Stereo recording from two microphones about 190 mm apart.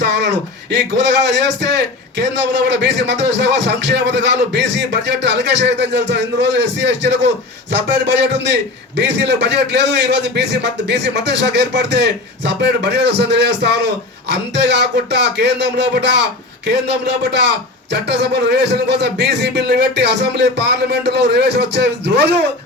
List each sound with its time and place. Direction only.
0.0 s a man's voice: 65° right (ahead or behind)